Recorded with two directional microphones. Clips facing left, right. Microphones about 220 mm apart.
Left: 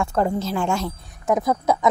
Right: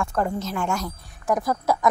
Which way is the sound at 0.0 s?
30° left (ahead or behind).